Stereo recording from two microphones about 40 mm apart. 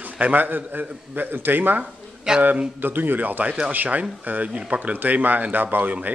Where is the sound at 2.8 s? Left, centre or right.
Right.